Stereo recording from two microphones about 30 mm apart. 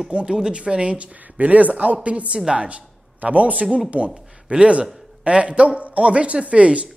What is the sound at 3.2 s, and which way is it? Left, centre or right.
A woman's voice, right.